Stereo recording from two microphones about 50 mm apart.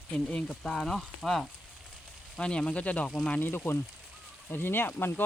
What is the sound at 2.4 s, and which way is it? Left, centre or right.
Speech, centre.